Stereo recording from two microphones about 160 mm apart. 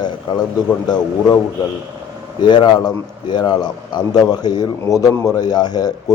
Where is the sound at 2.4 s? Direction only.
25° left (ahead or behind).